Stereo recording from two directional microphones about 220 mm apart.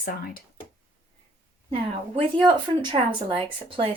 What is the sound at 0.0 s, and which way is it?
Speech, 40° left (ahead or behind).